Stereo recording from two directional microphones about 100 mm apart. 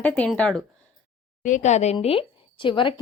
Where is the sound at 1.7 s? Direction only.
90° left; by 2.9 s 55° left (ahead or behind).